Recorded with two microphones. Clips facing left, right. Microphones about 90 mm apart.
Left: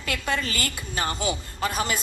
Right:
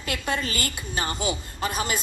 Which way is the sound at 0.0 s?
30° right (ahead or behind).